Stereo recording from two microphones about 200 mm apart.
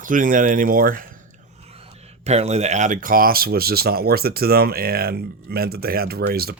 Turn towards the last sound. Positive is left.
turn(degrees=-50)  # may be behind; listen again after turning